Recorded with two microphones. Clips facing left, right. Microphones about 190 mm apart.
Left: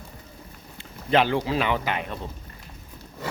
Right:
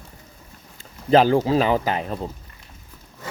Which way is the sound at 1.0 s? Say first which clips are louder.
Right 6 dB; 35° right (ahead or behind).